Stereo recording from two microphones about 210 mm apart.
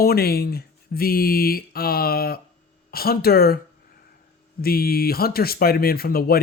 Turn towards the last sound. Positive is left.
turn(degrees=45)  # may be behind; listen again after turning